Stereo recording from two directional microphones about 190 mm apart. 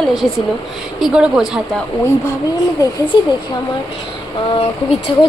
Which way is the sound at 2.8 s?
20° left (ahead or behind).